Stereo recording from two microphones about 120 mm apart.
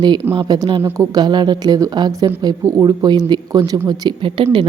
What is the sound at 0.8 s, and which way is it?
Speech, 20° right (ahead or behind).